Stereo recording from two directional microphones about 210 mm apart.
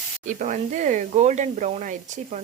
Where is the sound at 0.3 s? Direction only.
35° right (ahead or behind).